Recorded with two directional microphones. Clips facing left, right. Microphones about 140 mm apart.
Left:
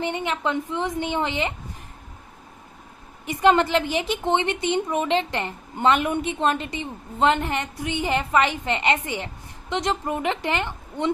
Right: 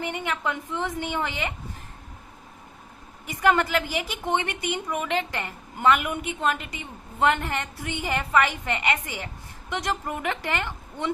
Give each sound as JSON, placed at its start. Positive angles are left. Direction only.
{"t": 0.0, "sound": "a woman's voice", "side_deg": 20}
{"t": 3.2, "sound": "a woman's voice", "side_deg": 25}